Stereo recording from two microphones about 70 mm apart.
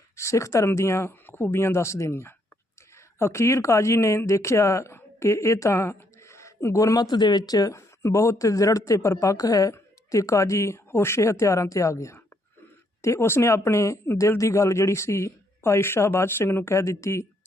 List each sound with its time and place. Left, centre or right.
0.2 s a man's voice: left